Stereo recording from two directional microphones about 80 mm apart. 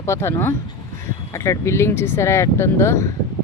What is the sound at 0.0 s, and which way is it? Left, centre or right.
A woman's voice, left.